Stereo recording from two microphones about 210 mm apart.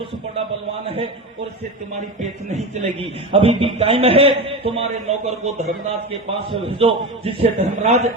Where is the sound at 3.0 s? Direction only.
25° right (ahead or behind).